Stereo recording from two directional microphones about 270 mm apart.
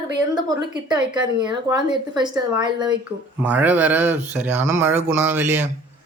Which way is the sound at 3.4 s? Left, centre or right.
Centre.